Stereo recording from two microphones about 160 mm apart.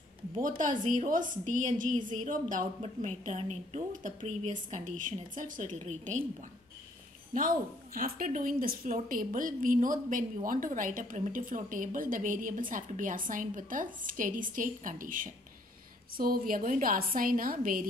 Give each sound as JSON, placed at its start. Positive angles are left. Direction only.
{"t": 0.4, "sound": "a woman's voice", "side_deg": -55}
{"t": 7.3, "sound": "a woman's voice", "side_deg": -55}